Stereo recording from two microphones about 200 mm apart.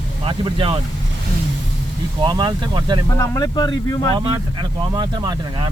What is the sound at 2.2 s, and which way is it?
Speech, 20° right (ahead or behind).